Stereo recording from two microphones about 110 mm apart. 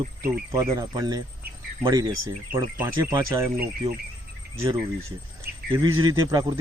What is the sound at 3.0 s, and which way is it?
Speech, 30° right (ahead or behind).